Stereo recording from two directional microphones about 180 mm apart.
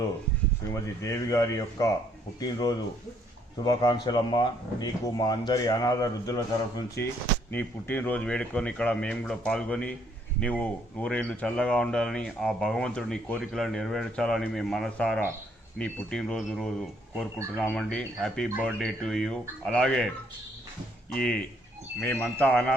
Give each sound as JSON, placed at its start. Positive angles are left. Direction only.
{"t": 0.7, "sound": "speech", "side_deg": 15}
{"t": 21.1, "sound": "speech", "side_deg": 5}